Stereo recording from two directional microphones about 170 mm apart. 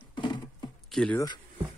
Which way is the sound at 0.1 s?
25° left (ahead or behind).